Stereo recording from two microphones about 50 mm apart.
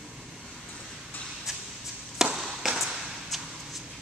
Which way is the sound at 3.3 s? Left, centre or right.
Centre.